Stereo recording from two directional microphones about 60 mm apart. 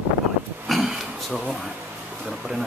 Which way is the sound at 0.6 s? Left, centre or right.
Centre.